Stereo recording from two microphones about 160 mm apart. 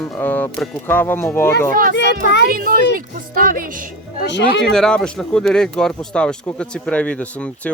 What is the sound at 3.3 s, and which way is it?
Music, 65° right (ahead or behind).